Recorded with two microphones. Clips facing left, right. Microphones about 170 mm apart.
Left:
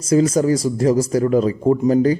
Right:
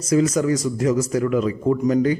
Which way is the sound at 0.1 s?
30° left (ahead or behind).